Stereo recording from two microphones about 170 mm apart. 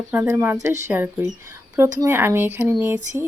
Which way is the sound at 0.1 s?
15° right (ahead or behind).